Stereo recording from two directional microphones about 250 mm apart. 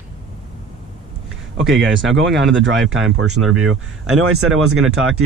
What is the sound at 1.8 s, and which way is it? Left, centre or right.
Speech, right.